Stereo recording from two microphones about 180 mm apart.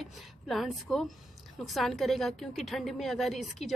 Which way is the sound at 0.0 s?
Centre (ahead or behind).